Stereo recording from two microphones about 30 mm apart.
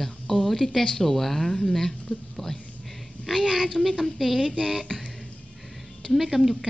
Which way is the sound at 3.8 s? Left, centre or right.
Centre.